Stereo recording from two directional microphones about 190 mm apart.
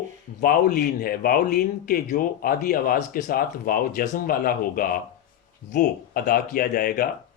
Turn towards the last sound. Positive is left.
turn(degrees=50)  # may be behind; listen again after turning